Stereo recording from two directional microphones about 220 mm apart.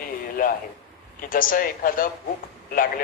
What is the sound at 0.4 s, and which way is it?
A man's voice, 40° left (ahead or behind).